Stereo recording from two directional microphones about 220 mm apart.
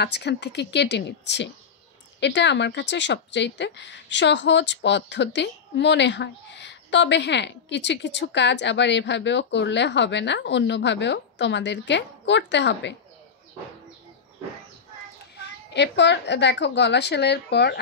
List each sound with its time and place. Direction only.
0.0 s speech: 50° left (ahead or behind)
15.3 s speech: 50° left (ahead or behind)